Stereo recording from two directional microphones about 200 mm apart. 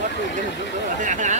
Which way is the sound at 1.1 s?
40° right (ahead or behind).